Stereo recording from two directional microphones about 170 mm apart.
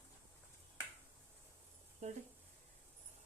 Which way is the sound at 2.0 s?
40° right (ahead or behind).